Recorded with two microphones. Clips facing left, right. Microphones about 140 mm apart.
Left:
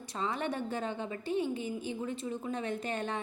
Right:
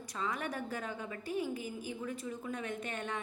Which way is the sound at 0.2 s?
30° left (ahead or behind).